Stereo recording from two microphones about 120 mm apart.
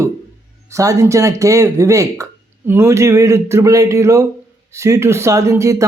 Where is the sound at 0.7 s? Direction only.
25° right (ahead or behind).